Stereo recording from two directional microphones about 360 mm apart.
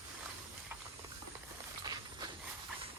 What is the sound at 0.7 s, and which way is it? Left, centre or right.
Steam, centre.